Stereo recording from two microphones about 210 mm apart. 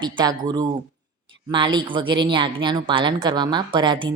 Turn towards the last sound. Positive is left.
turn(degrees=-20)  # may be behind; listen again after turning